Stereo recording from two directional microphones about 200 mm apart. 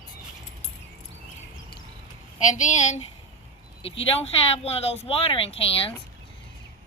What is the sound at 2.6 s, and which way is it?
A woman's voice, 35° left (ahead or behind).